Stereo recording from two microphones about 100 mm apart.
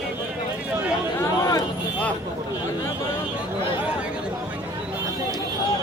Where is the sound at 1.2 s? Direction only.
35° left (ahead or behind).